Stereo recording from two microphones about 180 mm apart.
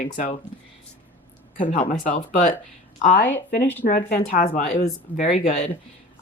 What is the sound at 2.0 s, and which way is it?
Speech, 45° left (ahead or behind).